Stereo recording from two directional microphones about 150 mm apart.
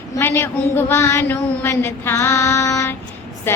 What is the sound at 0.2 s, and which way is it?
Child singing, 15° left (ahead or behind).